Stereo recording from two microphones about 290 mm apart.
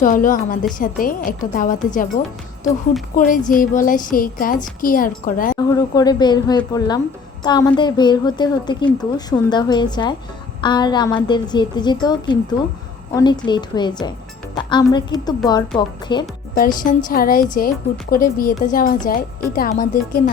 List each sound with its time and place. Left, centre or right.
0.0 s a woman's voice: left
5.5 s a woman's voice: centre
14.5 s music: centre
15.4 s a woman's voice: centre
16.6 s a woman's voice: left